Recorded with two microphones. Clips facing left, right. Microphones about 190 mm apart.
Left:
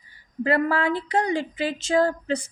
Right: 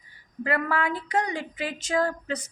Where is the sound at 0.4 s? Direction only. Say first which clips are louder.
Left 5 dB; 30° left (ahead or behind).